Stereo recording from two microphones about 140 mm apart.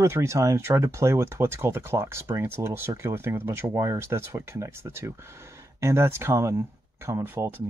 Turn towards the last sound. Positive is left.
turn(degrees=-15)  # may be behind; listen again after turning